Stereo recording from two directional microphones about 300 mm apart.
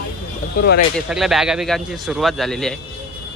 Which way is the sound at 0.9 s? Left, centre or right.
Centre.